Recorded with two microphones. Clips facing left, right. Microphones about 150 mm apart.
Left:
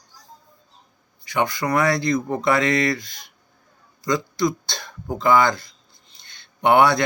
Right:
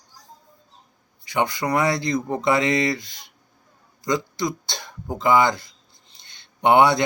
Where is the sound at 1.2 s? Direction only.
25° right (ahead or behind).